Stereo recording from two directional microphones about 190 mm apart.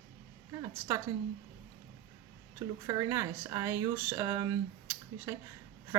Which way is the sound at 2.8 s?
15° right (ahead or behind).